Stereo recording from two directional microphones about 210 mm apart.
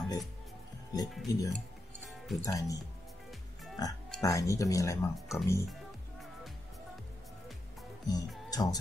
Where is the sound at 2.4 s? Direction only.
15° left (ahead or behind).